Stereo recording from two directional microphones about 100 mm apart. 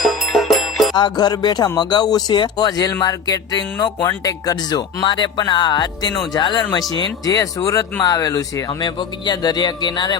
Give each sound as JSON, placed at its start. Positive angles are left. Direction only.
{"t": 0.0, "sound": "music", "side_deg": 0}
{"t": 0.9, "sound": "speech", "side_deg": 45}
{"t": 7.3, "sound": "speech", "side_deg": 35}